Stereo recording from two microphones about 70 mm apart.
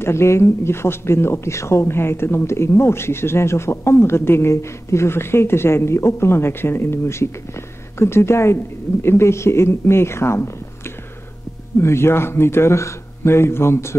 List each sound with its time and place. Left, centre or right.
0.0 s speech: left
11.8 s speech: left